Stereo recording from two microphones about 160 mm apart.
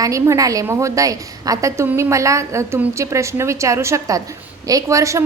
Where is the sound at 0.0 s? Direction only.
20° right (ahead or behind).